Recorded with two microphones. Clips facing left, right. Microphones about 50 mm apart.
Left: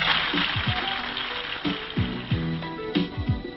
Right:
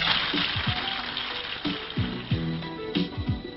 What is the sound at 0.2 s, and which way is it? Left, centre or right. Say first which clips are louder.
Music: left 2 dB; centre.